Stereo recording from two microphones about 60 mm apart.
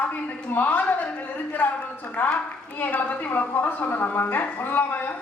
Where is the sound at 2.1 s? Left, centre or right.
Left.